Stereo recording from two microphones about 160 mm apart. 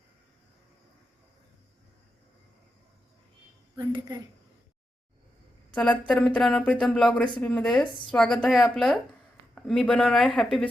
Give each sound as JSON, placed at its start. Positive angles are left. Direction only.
{"t": 3.8, "sound": "speech", "side_deg": -25}
{"t": 6.1, "sound": "speech", "side_deg": 5}